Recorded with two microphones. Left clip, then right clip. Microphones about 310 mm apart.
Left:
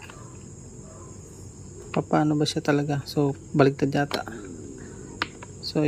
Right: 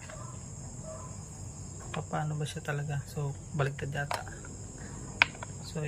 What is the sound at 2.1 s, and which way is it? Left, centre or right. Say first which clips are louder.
Speech: left 15 dB; centre.